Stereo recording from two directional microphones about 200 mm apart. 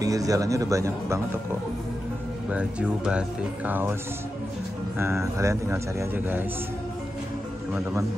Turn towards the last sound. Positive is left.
turn(degrees=-10)  # may be behind; listen again after turning